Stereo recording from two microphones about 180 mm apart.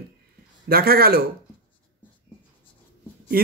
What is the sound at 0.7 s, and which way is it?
Speech, 55° right (ahead or behind).